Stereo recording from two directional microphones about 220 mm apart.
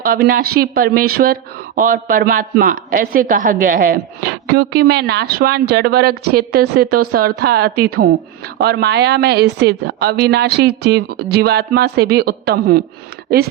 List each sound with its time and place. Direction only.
0.0 s speech: 40° right (ahead or behind)